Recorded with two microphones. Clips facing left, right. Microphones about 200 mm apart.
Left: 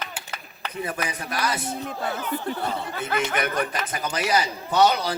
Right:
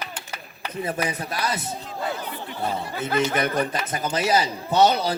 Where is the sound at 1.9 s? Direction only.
55° left (ahead or behind).